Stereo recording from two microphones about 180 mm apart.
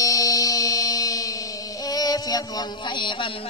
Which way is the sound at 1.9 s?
20° left (ahead or behind).